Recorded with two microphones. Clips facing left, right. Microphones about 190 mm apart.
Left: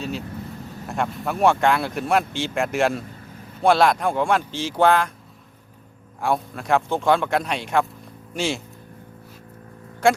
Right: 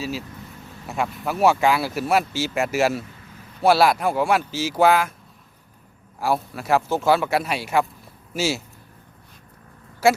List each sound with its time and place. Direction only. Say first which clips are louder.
0.0 s speech: left 1 dB; 5° right (ahead or behind)
6.1 s speech: even; 5° right (ahead or behind)
10.0 s speech: even; 5° right (ahead or behind)